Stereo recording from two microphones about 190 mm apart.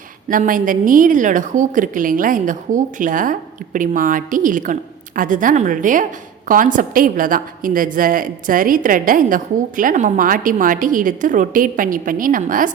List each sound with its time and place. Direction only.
0.3 s a woman's voice: 45° right (ahead or behind)